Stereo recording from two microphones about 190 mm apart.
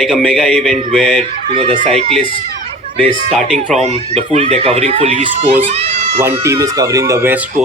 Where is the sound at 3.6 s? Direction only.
35° right (ahead or behind).